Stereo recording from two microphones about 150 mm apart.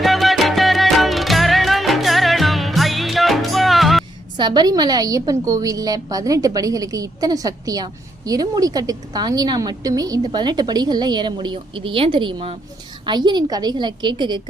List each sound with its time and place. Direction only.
0.0 s music: centre (ahead or behind)
4.4 s a woman's voice: 30° right (ahead or behind)